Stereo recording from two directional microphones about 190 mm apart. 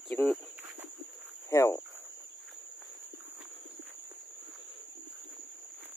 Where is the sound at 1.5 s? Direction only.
15° left (ahead or behind).